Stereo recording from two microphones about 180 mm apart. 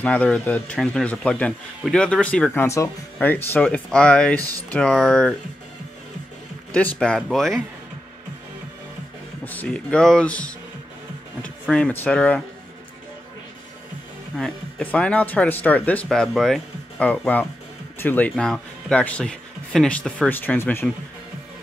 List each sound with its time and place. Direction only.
0.0 s speech: 5° left (ahead or behind)
4.4 s speech: 20° right (ahead or behind)
4.6 s speech: 5° left (ahead or behind)
6.7 s speech: 5° left (ahead or behind)
9.4 s speech: 10° left (ahead or behind)
11.6 s speech: 5° left (ahead or behind)
14.3 s speech: 5° left (ahead or behind)